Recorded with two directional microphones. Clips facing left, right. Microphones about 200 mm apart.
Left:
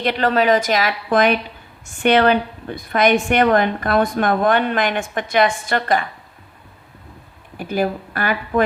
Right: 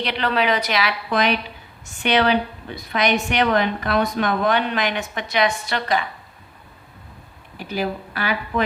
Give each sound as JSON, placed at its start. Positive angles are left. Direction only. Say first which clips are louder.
{"t": 0.0, "sound": "a woman's voice", "louder": "left 4 dB", "side_deg": 45}
{"t": 7.5, "sound": "a woman's voice", "louder": "left 4 dB", "side_deg": 50}